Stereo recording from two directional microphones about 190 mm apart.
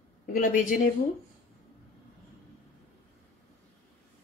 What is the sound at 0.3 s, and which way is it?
Speech, 45° left (ahead or behind).